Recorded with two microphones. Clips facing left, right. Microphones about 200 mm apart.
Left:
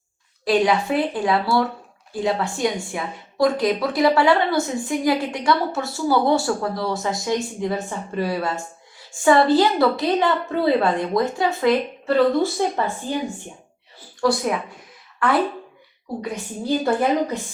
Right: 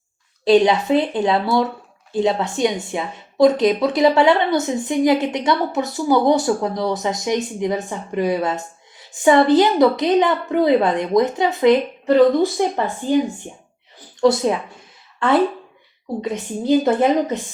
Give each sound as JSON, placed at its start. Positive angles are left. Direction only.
{"t": 0.4, "sound": "a woman's voice", "side_deg": -25}